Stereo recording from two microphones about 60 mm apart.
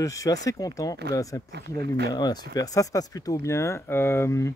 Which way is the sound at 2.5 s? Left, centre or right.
Left.